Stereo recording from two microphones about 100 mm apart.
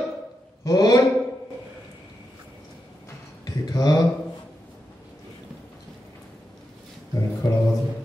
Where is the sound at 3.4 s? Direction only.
40° left (ahead or behind).